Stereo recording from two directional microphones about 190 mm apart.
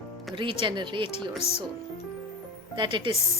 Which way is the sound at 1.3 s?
35° left (ahead or behind).